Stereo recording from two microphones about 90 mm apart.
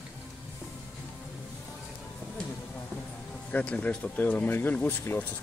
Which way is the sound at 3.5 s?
15° left (ahead or behind).